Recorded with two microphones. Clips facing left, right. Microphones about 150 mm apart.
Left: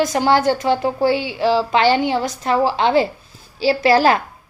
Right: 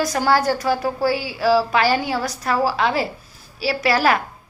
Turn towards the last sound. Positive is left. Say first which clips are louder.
# left 4 dB
turn(degrees=30)  # may be behind; listen again after turning